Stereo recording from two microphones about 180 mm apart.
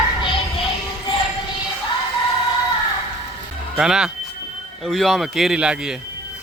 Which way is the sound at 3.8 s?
5° right (ahead or behind).